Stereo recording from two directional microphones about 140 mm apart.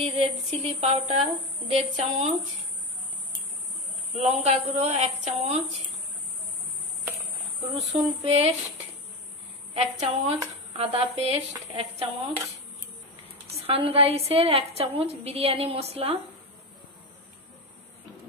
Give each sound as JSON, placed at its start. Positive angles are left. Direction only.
{"t": 0.0, "sound": "a woman's voice", "side_deg": -45}
{"t": 4.2, "sound": "a woman's voice", "side_deg": -50}
{"t": 7.1, "sound": "cricket", "side_deg": -20}
{"t": 8.2, "sound": "a woman's voice", "side_deg": -45}
{"t": 9.8, "sound": "a woman's voice", "side_deg": -50}
{"t": 13.6, "sound": "a woman's voice", "side_deg": -45}